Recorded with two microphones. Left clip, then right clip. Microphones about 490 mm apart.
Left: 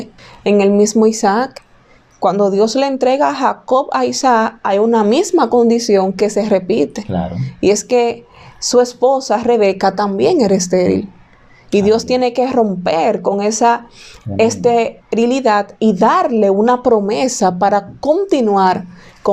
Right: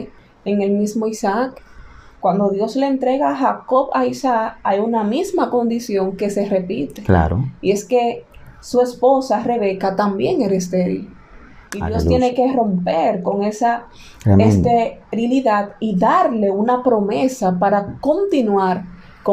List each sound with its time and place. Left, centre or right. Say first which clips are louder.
0.4 s speech: left 8 dB; left
2.2 s speech: left 5 dB; left
19.2 s a sound: left 3 dB; left